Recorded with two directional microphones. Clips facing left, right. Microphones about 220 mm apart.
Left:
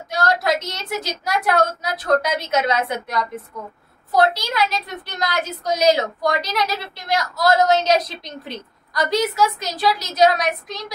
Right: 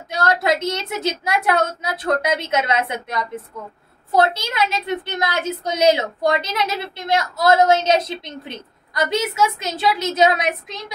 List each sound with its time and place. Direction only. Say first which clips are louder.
0.1 s a woman's voice: right 1 dB; 25° right (ahead or behind)
4.1 s a woman's voice: even; 25° right (ahead or behind)